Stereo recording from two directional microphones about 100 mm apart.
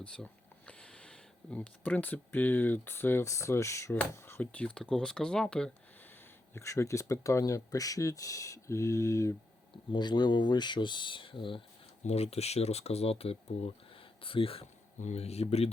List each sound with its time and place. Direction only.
0.0 s speech: 10° left (ahead or behind)
4.6 s speech: 10° left (ahead or behind)
6.5 s speech: 25° left (ahead or behind)
9.9 s speech: 45° left (ahead or behind)
12.1 s speech: 90° left; by 14.6 s 65° left (ahead or behind)
15.1 s speech: 90° left